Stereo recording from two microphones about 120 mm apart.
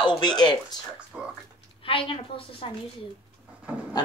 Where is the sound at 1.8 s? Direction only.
50° left (ahead or behind).